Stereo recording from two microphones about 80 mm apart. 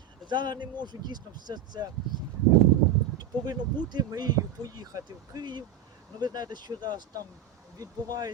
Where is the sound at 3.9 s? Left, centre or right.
Right.